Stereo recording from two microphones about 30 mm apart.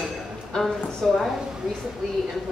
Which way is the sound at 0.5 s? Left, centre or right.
Left.